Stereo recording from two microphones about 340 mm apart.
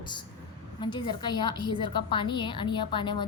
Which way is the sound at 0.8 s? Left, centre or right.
Centre.